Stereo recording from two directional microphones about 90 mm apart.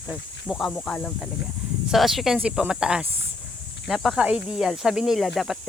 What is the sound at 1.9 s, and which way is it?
Speech, 5° right (ahead or behind).